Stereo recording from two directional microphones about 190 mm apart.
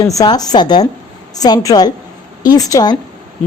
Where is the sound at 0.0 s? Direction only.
20° left (ahead or behind).